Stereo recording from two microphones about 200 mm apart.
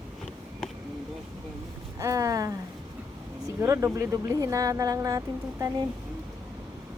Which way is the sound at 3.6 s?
15° right (ahead or behind).